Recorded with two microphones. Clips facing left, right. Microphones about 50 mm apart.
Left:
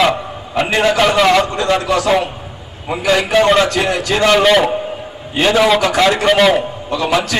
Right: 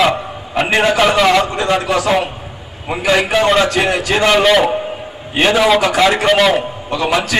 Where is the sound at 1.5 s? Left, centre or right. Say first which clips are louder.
Even; centre.